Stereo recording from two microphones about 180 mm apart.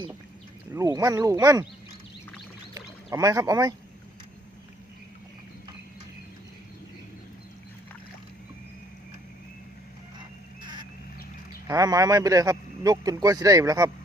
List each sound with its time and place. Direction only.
0.7 s speech: 20° right (ahead or behind)
3.1 s speech: 20° right (ahead or behind)
10.6 s a sound: 25° right (ahead or behind)
11.7 s speech: 20° right (ahead or behind)